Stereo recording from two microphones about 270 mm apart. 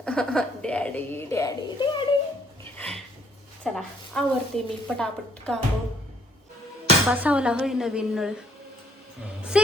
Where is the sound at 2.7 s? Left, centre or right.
Centre.